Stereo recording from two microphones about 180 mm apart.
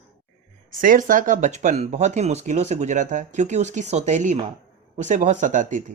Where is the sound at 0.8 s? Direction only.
50° right (ahead or behind).